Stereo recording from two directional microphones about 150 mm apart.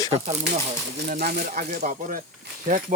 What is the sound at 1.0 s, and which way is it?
Speech, 75° right (ahead or behind).